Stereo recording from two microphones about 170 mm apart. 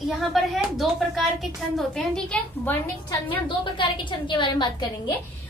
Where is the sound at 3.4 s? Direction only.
30° left (ahead or behind).